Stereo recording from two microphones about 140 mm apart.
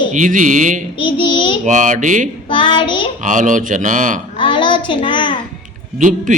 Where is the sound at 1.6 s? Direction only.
60° right (ahead or behind).